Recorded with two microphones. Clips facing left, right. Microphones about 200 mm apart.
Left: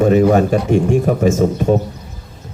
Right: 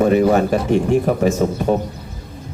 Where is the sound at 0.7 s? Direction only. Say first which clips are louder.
Even; 45° left (ahead or behind).